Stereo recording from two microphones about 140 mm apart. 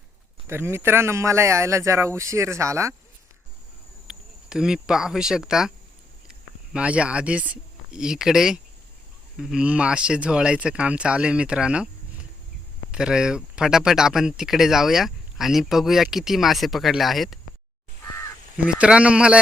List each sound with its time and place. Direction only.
0.4 s a man's voice: 15° right (ahead or behind)
4.0 s speech: 5° right (ahead or behind)
6.7 s speech: 10° right (ahead or behind)
12.9 s speech: 5° right (ahead or behind)
18.5 s speech: 5° right (ahead or behind)